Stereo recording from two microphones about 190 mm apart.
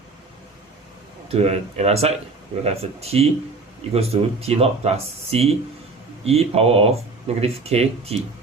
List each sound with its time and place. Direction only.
1.3 s speech: 35° right (ahead or behind)